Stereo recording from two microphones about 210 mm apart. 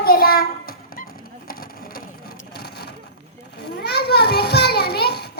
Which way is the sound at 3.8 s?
50° left (ahead or behind).